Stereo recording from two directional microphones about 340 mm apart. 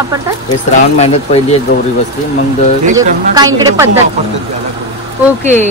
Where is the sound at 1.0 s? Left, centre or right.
Centre.